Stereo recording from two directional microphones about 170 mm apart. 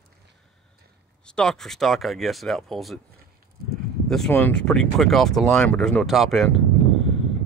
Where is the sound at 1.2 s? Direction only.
5° left (ahead or behind).